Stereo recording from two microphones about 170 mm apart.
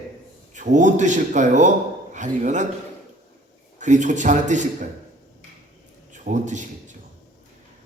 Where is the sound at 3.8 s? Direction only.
45° right (ahead or behind).